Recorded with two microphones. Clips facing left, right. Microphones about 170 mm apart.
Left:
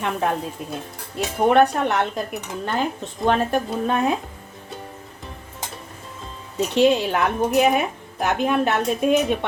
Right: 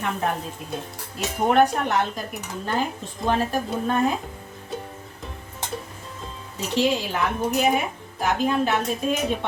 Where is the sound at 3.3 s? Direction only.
65° left (ahead or behind).